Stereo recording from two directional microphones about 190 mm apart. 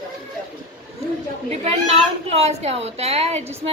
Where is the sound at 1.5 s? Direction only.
35° right (ahead or behind).